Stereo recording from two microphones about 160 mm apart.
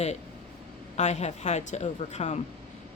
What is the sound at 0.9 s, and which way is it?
Speech, 45° left (ahead or behind).